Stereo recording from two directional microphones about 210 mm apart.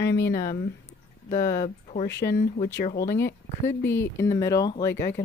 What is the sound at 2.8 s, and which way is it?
Speech, 40° left (ahead or behind).